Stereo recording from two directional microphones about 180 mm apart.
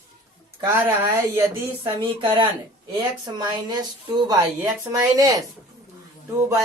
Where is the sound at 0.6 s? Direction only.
20° right (ahead or behind).